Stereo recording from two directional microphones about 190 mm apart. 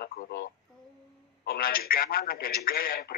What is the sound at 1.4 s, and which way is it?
Speech, 50° left (ahead or behind).